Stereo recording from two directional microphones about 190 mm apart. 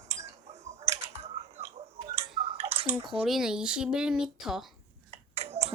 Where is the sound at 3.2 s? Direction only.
Centre (ahead or behind).